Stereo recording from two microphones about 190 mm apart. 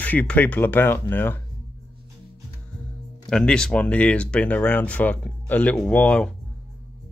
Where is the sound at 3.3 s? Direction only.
5° left (ahead or behind).